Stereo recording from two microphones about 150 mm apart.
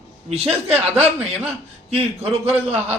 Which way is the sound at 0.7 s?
45° right (ahead or behind).